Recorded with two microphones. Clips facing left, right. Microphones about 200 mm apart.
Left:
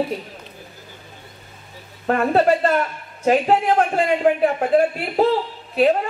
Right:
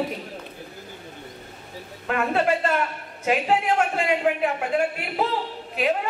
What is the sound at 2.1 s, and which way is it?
A woman's voice, 40° left (ahead or behind).